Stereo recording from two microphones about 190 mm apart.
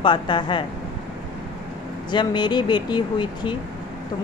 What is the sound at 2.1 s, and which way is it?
Speech, 25° left (ahead or behind).